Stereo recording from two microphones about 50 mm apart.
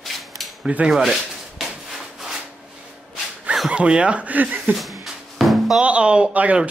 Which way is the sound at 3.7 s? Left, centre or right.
Right.